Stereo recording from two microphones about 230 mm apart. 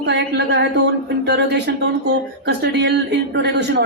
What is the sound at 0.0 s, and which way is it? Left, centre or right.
Speech, right.